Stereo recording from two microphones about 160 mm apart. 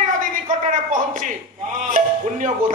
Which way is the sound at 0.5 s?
55° right (ahead or behind).